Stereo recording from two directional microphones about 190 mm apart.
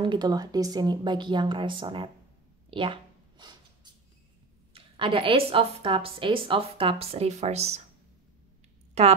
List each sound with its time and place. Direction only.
0.0 s a woman's voice: 20° right (ahead or behind)
2.7 s a sound: 25° right (ahead or behind)
4.7 s a woman's voice: 30° right (ahead or behind)
9.0 s speech: 35° right (ahead or behind)